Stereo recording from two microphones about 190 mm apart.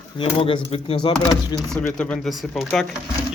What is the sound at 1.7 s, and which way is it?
Speech, 5° left (ahead or behind).